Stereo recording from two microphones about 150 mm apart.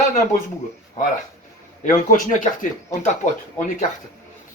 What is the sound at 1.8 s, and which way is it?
Speech, 65° left (ahead or behind).